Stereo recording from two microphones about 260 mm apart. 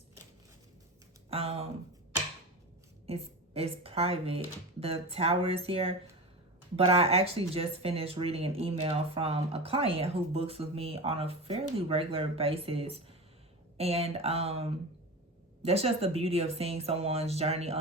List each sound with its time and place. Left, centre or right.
1.3 s speech: right
3.1 s a woman's voice: right